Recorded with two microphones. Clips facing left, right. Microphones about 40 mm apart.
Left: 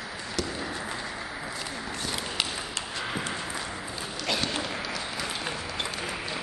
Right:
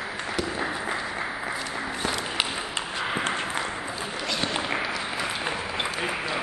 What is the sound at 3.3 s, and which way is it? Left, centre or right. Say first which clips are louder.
Clip-clop: right 5 dB; right.